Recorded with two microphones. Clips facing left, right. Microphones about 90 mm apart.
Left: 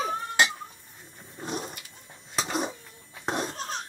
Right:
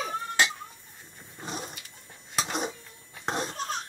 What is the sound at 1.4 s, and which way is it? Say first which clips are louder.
Dog: left 3 dB; centre (ahead or behind).